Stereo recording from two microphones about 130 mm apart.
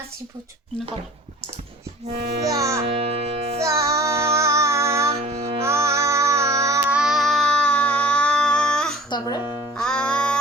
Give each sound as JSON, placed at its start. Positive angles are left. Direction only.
{"t": 2.5, "sound": "a child's voice", "side_deg": -25}
{"t": 2.8, "sound": "music", "side_deg": -45}
{"t": 3.6, "sound": "music", "side_deg": -25}
{"t": 5.2, "sound": "music", "side_deg": -50}
{"t": 5.6, "sound": "music", "side_deg": -20}
{"t": 6.8, "sound": "a sound", "side_deg": -5}
{"t": 9.0, "sound": "music", "side_deg": 35}
{"t": 9.7, "sound": "music", "side_deg": 5}